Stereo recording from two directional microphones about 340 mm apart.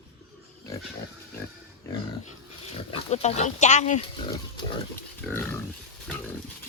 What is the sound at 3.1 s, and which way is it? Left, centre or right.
Speech, centre.